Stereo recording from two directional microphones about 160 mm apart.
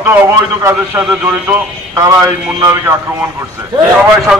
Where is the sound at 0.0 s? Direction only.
15° right (ahead or behind).